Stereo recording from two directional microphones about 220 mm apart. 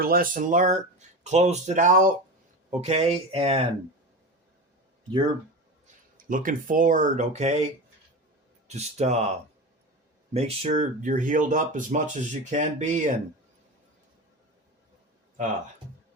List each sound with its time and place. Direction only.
0.0 s speech: 40° right (ahead or behind); by 3.7 s 25° right (ahead or behind)
6.2 s speech: 40° right (ahead or behind)
10.3 s speech: 30° right (ahead or behind)